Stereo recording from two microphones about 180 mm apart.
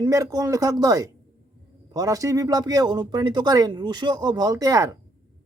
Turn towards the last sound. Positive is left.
turn(degrees=-20)  # may be behind; listen again after turning